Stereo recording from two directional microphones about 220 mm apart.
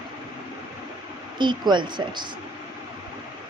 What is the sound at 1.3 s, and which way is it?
Speech, 20° right (ahead or behind).